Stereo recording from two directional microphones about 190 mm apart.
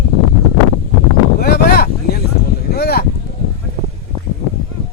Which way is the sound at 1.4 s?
55° left (ahead or behind).